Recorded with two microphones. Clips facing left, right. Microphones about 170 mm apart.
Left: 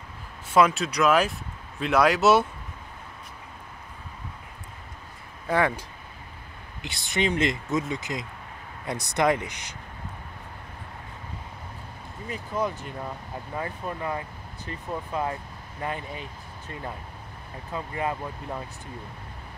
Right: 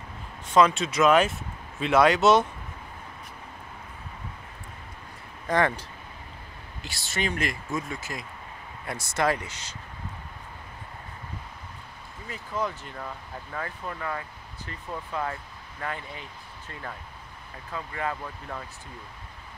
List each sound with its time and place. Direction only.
0.5 s speech: 5° left (ahead or behind)
5.5 s speech: 10° left (ahead or behind)
12.3 s speech: 15° left (ahead or behind)
17.7 s speech: 20° left (ahead or behind)